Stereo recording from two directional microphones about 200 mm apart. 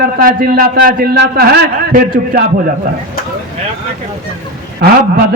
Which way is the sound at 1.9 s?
40° right (ahead or behind).